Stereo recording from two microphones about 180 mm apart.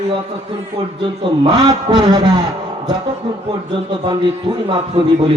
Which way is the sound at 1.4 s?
20° right (ahead or behind).